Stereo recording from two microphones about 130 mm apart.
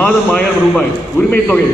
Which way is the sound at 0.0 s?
10° left (ahead or behind).